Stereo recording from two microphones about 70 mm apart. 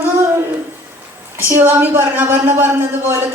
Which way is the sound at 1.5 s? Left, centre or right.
Right.